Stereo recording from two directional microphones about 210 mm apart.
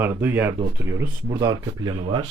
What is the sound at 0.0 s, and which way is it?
Speech, 10° right (ahead or behind).